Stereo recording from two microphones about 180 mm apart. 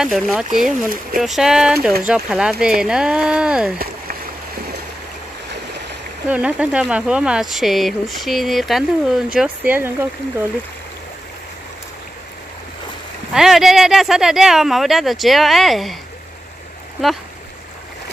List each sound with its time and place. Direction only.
0.0 s speech: centre (ahead or behind)
3.7 s a sound: 55° right (ahead or behind)
6.2 s speech: 10° right (ahead or behind)
13.3 s speech: centre (ahead or behind)